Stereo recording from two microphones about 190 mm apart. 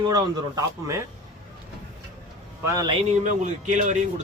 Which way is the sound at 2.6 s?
20° right (ahead or behind).